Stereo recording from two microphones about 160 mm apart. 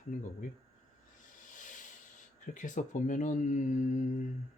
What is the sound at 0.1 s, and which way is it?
Speech, 50° left (ahead or behind).